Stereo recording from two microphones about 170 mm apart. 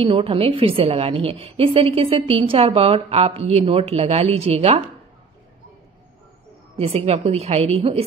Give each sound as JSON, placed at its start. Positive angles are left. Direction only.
{"t": 0.0, "sound": "a woman's voice", "side_deg": -30}
{"t": 6.8, "sound": "a woman's voice", "side_deg": -35}